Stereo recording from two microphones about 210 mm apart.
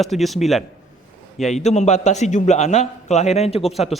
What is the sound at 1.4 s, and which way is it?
A man's voice, 35° left (ahead or behind).